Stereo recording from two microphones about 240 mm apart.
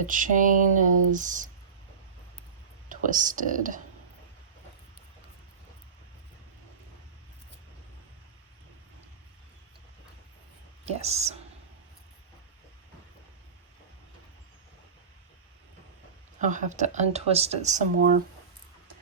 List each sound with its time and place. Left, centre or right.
0.0 s speech: right
2.9 s speech: right
10.8 s speech: right
16.4 s speech: right